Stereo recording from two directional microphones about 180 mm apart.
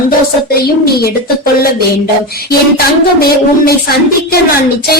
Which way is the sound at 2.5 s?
55° left (ahead or behind).